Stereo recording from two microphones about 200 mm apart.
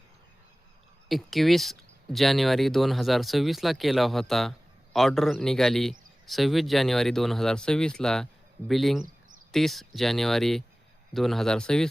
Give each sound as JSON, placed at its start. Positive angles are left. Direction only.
{"t": 1.0, "sound": "a man's voice", "side_deg": 0}